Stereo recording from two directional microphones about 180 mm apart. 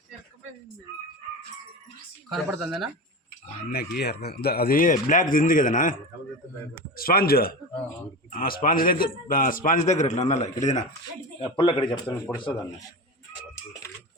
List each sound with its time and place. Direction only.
2.3 s speech: 5° right (ahead or behind)
3.7 s speech: 60° left (ahead or behind); by 10.8 s 40° left (ahead or behind)
11.3 s speech: 30° left (ahead or behind)
11.8 s a man's voice: 10° left (ahead or behind)